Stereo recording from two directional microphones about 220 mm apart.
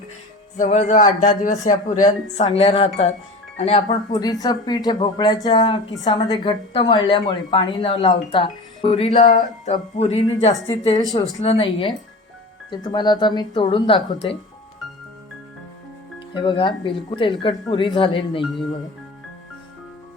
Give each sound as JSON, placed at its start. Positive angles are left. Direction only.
{"t": 0.5, "sound": "a woman's voice", "side_deg": 35}
{"t": 10.5, "sound": "a woman's voice", "side_deg": 15}
{"t": 16.3, "sound": "a woman's voice", "side_deg": 20}
{"t": 18.4, "sound": "speech", "side_deg": 0}